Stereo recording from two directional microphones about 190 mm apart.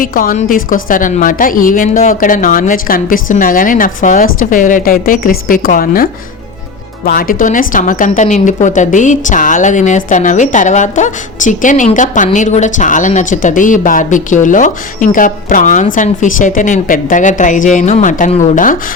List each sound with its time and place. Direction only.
0.0 s a woman's voice: 45° left (ahead or behind)